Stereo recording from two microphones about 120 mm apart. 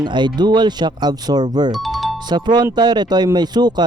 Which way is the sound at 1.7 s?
Centre (ahead or behind).